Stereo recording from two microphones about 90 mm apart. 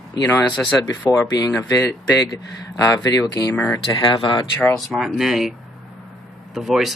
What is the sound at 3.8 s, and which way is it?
Speech, 75° left (ahead or behind).